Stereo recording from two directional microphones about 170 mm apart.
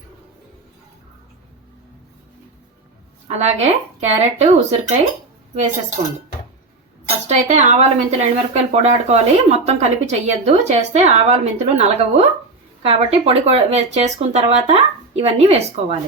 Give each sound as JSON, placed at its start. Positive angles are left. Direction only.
{"t": 3.2, "sound": "speech", "side_deg": -40}
{"t": 7.3, "sound": "a woman's voice", "side_deg": -45}